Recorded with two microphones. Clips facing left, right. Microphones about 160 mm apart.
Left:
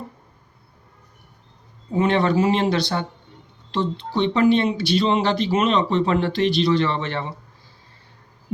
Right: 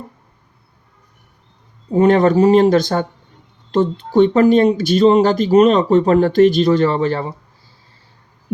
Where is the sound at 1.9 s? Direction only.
40° right (ahead or behind).